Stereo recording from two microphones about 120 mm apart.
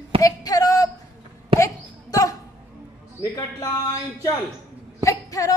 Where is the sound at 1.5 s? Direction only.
50° right (ahead or behind).